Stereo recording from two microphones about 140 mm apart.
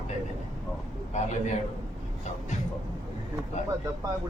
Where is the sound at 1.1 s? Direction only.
60° left (ahead or behind).